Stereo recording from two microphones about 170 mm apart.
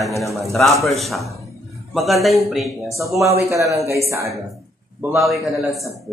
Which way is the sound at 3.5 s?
15° right (ahead or behind).